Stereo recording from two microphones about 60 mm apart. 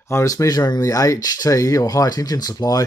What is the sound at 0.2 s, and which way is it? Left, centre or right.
Speech, left.